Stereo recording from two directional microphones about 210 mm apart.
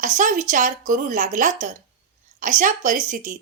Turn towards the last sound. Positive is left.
turn(degrees=-40)  # may be behind; listen again after turning